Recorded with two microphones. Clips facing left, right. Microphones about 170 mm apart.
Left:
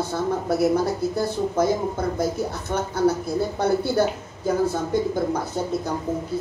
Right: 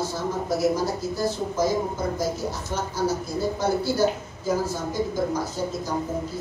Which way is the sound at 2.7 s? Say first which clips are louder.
Left 5 dB; 60° left (ahead or behind).